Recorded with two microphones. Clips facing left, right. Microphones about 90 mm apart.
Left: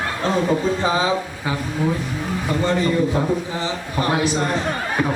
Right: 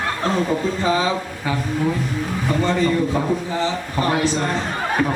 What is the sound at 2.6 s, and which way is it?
A man's voice, 15° left (ahead or behind).